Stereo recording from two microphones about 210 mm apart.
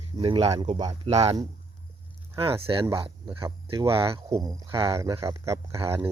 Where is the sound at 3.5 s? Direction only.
15° right (ahead or behind).